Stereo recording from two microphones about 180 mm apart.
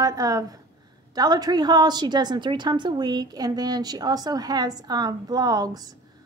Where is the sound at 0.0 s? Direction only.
20° right (ahead or behind).